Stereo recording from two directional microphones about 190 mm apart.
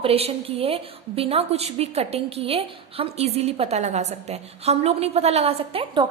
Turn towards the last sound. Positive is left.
turn(degrees=-25)  # may be behind; listen again after turning